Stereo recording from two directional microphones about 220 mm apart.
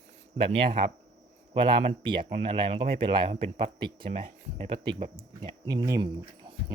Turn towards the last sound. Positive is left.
turn(degrees=-20)  # may be behind; listen again after turning